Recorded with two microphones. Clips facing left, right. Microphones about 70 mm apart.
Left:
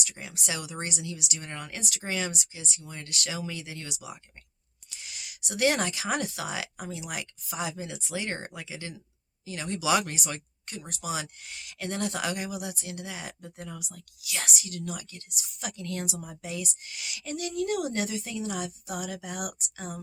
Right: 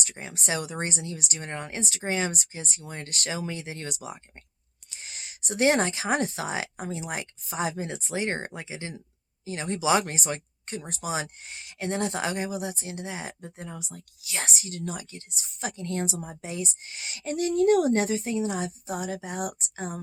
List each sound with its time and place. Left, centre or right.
0.0 s speech: right